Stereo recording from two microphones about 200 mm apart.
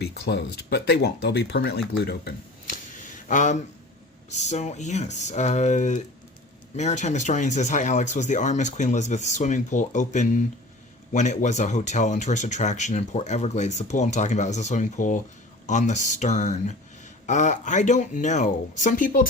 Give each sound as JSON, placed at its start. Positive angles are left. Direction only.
{"t": 0.0, "sound": "speech", "side_deg": 55}
{"t": 2.0, "sound": "a sound", "side_deg": 45}
{"t": 4.3, "sound": "speech", "side_deg": 35}